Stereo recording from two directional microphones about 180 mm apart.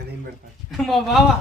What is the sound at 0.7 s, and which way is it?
Speech, centre (ahead or behind).